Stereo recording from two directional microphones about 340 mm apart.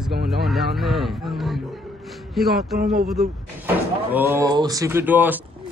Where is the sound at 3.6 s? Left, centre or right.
Centre.